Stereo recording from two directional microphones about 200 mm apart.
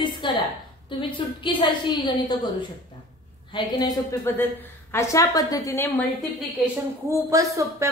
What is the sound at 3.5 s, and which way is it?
A woman's voice, 20° left (ahead or behind).